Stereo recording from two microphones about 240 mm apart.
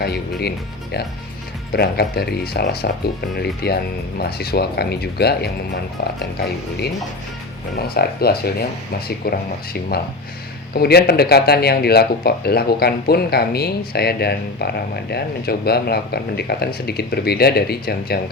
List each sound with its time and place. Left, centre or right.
0.0 s speech: left
1.7 s speech: left
7.8 s speech: left
10.8 s speech: left